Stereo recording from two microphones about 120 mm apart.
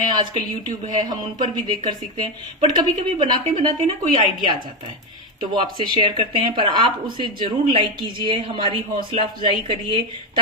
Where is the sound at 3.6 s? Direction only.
35° right (ahead or behind).